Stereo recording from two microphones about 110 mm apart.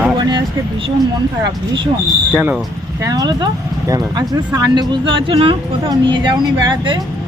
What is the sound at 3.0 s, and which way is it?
Speech, 35° right (ahead or behind).